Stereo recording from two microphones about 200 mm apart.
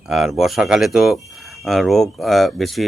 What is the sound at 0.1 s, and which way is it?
A man's voice, centre (ahead or behind).